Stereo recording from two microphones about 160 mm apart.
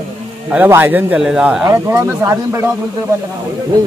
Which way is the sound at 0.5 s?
15° right (ahead or behind).